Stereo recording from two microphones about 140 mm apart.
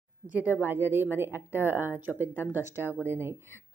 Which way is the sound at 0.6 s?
15° right (ahead or behind).